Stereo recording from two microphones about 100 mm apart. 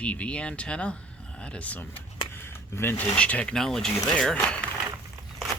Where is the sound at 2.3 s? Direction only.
25° left (ahead or behind).